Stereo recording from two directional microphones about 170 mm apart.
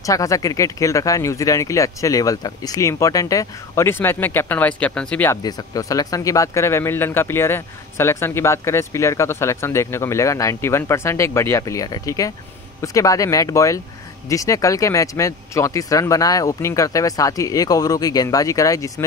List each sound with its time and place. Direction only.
0.0 s speech: 20° left (ahead or behind)
5.4 s speech: 20° left (ahead or behind)